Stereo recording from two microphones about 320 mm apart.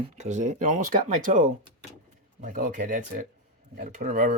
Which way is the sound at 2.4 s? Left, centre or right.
Right.